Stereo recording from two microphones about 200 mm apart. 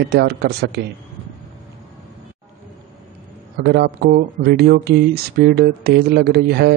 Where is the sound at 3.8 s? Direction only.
50° right (ahead or behind).